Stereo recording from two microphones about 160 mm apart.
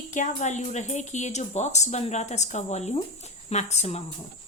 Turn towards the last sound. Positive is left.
turn(degrees=45)  # may be behind; listen again after turning